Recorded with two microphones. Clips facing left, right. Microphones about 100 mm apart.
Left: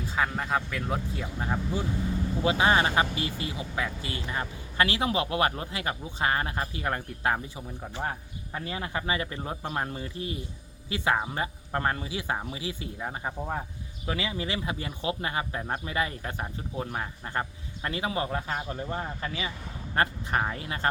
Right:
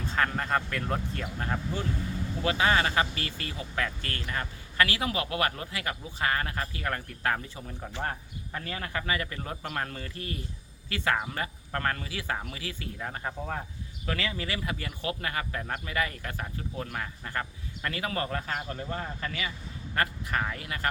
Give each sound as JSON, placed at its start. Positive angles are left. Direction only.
{"t": 0.0, "sound": "speech", "side_deg": 5}